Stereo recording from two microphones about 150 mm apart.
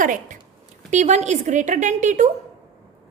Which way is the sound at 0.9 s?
50° right (ahead or behind).